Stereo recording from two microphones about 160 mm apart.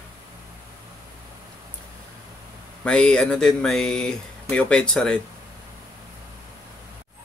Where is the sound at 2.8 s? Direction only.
5° left (ahead or behind).